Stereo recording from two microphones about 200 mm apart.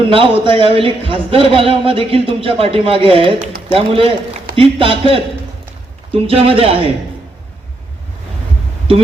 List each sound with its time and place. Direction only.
0.1 s a man's voice: 25° right (ahead or behind)